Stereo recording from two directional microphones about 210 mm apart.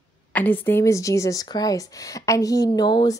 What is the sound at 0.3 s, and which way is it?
Speech, 10° left (ahead or behind).